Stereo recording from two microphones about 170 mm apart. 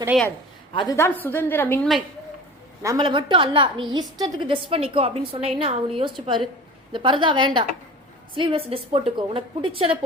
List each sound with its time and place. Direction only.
0.1 s speech: 5° right (ahead or behind)
0.7 s a woman's voice: 30° left (ahead or behind)
0.9 s a woman's voice: 15° left (ahead or behind)
2.8 s a woman's voice: 25° right (ahead or behind)